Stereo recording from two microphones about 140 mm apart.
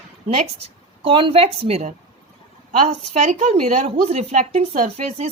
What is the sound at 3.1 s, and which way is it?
Speech, 55° right (ahead or behind).